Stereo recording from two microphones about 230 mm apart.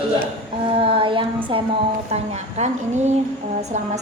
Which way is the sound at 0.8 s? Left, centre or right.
Right.